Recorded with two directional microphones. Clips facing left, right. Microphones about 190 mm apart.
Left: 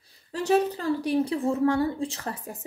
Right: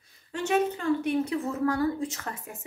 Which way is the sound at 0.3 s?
35° left (ahead or behind).